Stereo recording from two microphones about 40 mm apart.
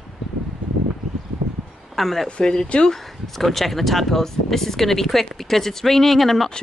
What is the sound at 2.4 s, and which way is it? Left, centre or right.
Speech, centre.